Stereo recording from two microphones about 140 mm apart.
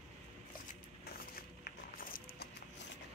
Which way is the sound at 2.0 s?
90° left.